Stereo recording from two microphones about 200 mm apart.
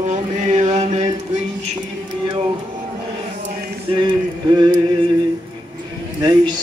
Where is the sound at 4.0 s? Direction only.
20° right (ahead or behind).